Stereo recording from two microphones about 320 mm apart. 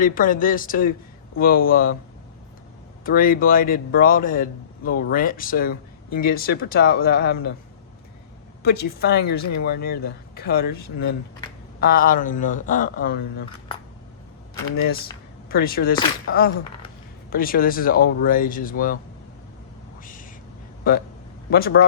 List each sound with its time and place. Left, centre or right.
0.0 s a man's voice: left
3.0 s a man's voice: left
8.6 s a man's voice: left
15.4 s a man's voice: left
20.9 s a man's voice: left